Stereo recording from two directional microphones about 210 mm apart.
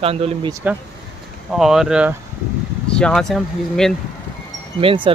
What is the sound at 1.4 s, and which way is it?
Speech, centre (ahead or behind).